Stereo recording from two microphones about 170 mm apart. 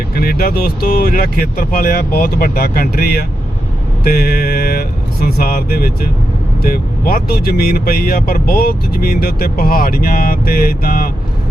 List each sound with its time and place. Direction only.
0.2 s speech: 60° left (ahead or behind)